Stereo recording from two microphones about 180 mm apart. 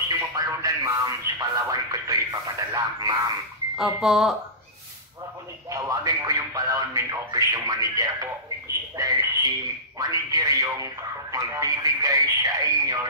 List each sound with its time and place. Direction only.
0.2 s speech: 20° right (ahead or behind)
3.7 s speech: centre (ahead or behind)
5.7 s speech: 20° right (ahead or behind)